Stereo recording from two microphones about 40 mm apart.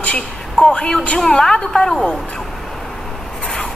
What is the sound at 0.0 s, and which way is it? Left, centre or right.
A woman's voice, left.